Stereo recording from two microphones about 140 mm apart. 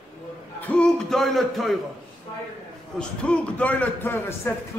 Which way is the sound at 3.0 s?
10° left (ahead or behind).